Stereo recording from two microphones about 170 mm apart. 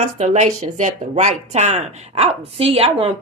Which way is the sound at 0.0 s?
40° right (ahead or behind).